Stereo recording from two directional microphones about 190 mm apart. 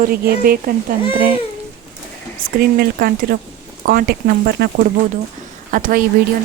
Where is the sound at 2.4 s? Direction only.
55° right (ahead or behind).